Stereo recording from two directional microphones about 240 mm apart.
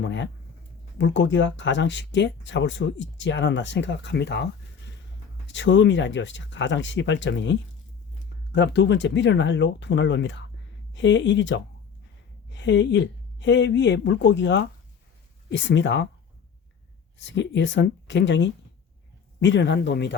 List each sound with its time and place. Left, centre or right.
0.0 s speech: left
5.5 s speech: left
8.5 s speech: left
17.2 s speech: left